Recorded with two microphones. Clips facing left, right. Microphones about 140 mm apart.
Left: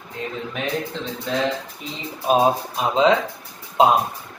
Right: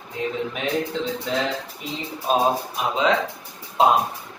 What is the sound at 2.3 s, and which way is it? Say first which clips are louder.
Speech: left 3 dB; 10° left (ahead or behind).